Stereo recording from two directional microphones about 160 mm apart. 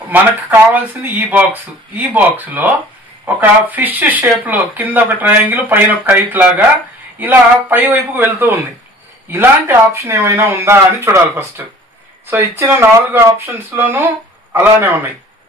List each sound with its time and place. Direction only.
1.0 s speech: 10° right (ahead or behind)